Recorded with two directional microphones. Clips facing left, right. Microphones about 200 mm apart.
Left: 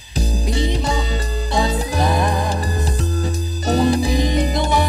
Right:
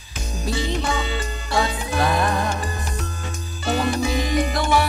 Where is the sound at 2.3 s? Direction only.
35° left (ahead or behind).